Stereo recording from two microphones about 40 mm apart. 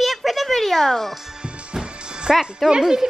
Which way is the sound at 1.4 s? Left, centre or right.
Right.